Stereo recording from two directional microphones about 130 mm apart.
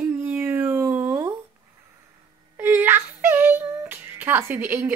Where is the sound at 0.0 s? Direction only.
15° right (ahead or behind).